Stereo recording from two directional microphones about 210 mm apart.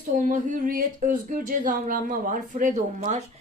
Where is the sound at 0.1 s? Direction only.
40° right (ahead or behind).